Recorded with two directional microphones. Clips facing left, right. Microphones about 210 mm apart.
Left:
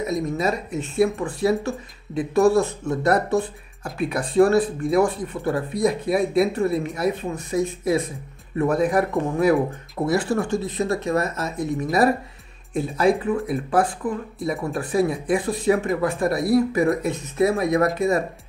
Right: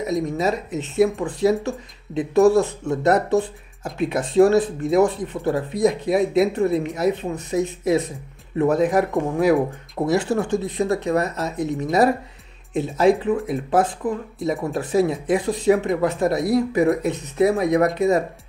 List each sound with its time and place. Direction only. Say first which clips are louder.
0.0 s speech: right 1 dB; 20° right (ahead or behind)